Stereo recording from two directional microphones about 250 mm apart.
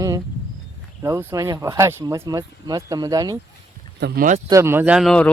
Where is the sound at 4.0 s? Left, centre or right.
Right.